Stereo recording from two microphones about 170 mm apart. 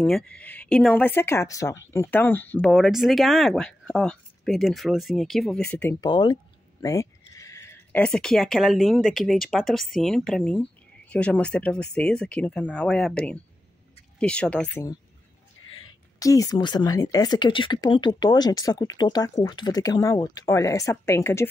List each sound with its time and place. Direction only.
0.0 s speech: 5° left (ahead or behind)
5.7 s speech: 10° left (ahead or behind)
5.9 s a woman's voice: 25° left (ahead or behind)
16.2 s a woman's voice: 20° left (ahead or behind)